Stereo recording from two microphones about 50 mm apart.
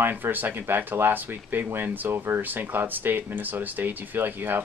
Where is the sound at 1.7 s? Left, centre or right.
Right.